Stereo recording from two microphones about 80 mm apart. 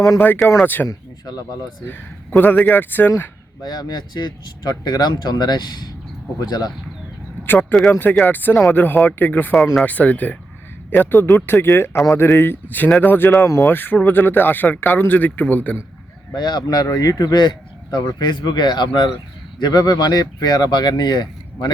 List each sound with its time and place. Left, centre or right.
0.4 s speech: left
0.9 s speech: left
2.3 s speech: left
3.6 s speech: left
7.4 s speech: left
16.3 s speech: left
19.5 s speech: left